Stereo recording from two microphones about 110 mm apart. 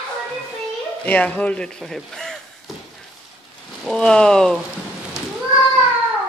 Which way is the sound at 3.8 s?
5° left (ahead or behind).